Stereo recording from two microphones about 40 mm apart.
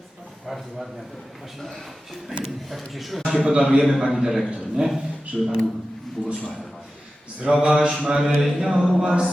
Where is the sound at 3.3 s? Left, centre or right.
Centre.